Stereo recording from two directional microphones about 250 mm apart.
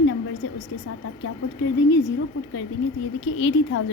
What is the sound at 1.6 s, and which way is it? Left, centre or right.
Speech, left.